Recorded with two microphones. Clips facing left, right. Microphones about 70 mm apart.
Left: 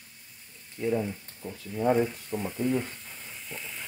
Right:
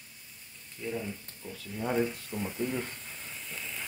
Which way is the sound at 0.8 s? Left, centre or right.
Left.